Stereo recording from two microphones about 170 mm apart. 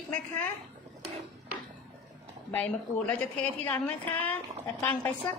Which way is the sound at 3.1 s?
10° left (ahead or behind).